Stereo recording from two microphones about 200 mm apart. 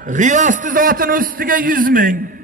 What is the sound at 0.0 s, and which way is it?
A man's voice, 40° right (ahead or behind).